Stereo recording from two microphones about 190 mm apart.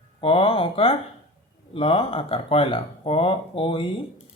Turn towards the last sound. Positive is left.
turn(degrees=30)  # may be behind; listen again after turning